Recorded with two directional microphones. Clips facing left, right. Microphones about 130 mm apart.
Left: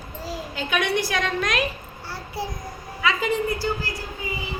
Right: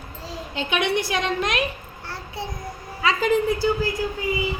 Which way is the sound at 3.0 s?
35° right (ahead or behind).